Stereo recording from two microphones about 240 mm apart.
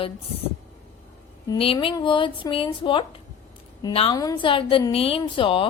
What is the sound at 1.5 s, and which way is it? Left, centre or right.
A woman's voice, left.